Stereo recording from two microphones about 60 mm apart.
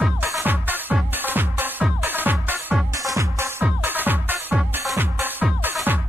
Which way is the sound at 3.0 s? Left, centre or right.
Right.